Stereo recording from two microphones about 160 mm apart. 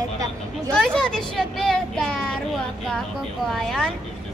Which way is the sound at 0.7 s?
5° left (ahead or behind).